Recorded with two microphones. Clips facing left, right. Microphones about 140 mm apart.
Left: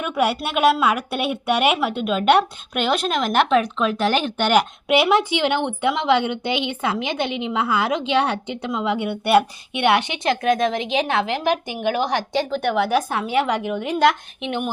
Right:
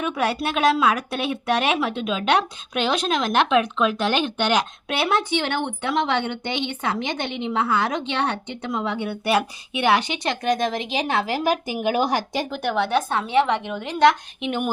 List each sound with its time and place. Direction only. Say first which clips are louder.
0.0 s speech: left 2 dB; 5° left (ahead or behind)
12.7 s speech: even; 5° left (ahead or behind)